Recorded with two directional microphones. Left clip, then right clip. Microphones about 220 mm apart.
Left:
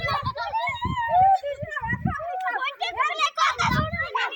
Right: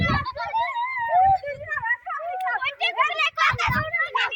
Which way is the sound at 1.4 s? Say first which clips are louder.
Right 2 dB; 5° left (ahead or behind).